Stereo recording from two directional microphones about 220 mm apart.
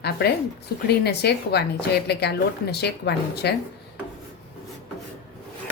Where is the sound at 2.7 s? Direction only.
50° left (ahead or behind).